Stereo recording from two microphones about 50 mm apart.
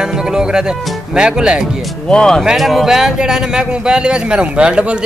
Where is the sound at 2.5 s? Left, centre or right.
Centre; by 5.0 s right.